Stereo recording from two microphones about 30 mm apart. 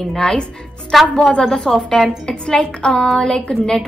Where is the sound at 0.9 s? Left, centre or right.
Centre.